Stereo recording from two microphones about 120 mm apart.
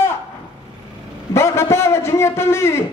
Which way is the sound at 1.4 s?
20° left (ahead or behind).